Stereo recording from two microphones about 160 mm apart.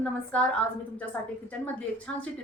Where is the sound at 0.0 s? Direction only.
5° left (ahead or behind).